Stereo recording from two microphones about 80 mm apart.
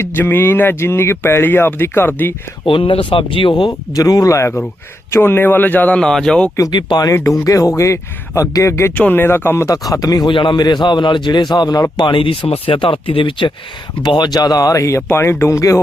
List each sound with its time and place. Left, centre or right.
0.0 s speech: left
2.6 s speech: left
5.1 s speech: left
6.0 s speech: centre
6.7 s speech: left
7.1 s speech: left
9.0 s speech: centre
9.2 s speech: left
9.6 s speech: left
10.2 s speech: left
12.0 s speech: left
14.0 s speech: left